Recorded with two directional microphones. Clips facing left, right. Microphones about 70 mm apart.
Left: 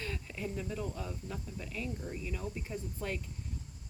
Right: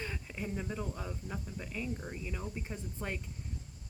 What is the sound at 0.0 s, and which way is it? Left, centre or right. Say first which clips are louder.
Speech: left 1 dB; centre.